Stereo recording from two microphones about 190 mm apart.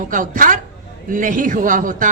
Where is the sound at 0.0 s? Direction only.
45° right (ahead or behind).